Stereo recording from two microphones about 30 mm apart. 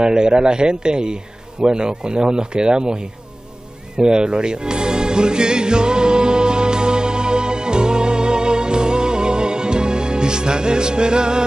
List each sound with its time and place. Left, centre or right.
0.0 s speech: right
3.9 s music: right